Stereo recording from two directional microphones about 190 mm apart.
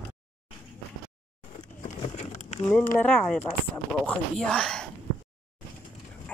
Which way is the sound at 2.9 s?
5° left (ahead or behind).